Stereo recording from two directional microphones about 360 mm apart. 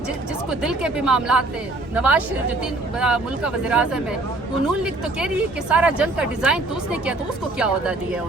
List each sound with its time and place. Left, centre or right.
0.6 s speech: centre